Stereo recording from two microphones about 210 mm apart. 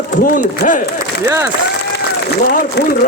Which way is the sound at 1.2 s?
15° right (ahead or behind).